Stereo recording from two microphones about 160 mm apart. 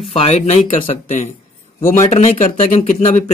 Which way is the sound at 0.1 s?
40° left (ahead or behind).